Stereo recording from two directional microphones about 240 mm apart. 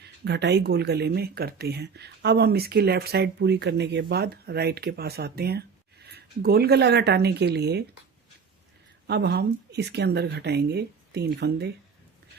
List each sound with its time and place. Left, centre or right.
0.0 s speech: right
9.0 s speech: right